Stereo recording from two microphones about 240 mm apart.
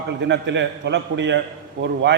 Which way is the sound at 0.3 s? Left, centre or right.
Right.